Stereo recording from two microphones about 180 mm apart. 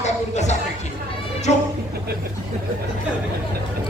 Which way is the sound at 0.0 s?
40° left (ahead or behind).